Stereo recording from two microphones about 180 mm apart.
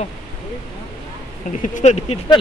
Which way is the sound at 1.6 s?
40° left (ahead or behind).